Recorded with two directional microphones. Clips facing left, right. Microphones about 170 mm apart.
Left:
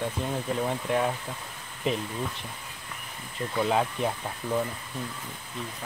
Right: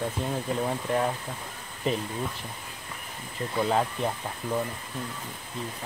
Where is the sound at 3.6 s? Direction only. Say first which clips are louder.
Even; centre (ahead or behind).